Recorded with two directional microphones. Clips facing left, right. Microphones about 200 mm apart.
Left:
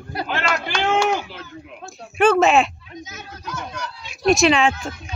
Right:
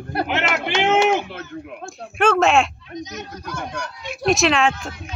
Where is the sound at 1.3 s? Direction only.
55° right (ahead or behind).